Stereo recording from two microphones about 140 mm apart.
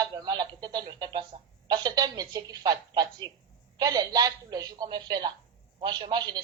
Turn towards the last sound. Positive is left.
turn(degrees=-35)  # may be behind; listen again after turning